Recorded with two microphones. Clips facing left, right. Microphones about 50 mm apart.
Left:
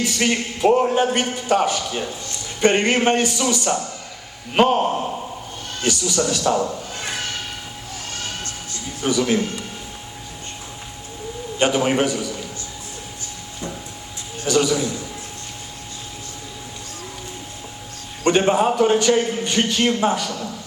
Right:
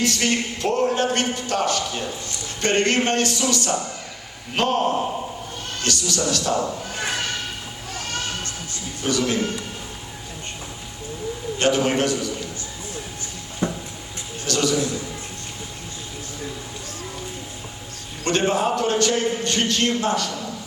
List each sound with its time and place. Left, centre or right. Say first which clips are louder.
0.0 s a man's voice: left 1 dB; centre
9.0 s a man's voice: left 3 dB; centre
11.6 s a man's voice: left 2 dB; centre
13.6 s a sound: right 6 dB; right
14.4 s a sound: left 3 dB; centre
18.3 s a man's voice: left 4 dB; centre